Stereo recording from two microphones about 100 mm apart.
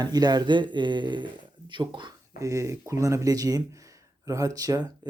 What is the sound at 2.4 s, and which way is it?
Speech, 30° right (ahead or behind).